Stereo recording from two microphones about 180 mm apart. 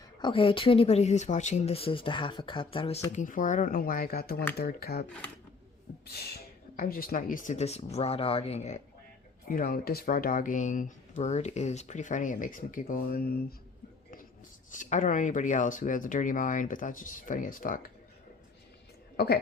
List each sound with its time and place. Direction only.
0.2 s speech: 30° left (ahead or behind)
3.1 s speech: 45° left (ahead or behind)
6.1 s speech: 60° left (ahead or behind); by 8.8 s 40° left (ahead or behind)
9.5 s speech: 55° left (ahead or behind)
14.7 s speech: 45° left (ahead or behind)
19.1 s a woman's voice: 60° left (ahead or behind)